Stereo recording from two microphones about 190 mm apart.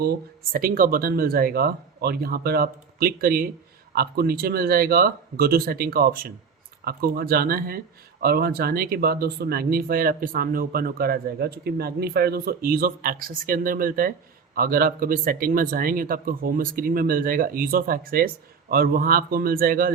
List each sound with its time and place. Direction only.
0.5 s speech: 50° right (ahead or behind)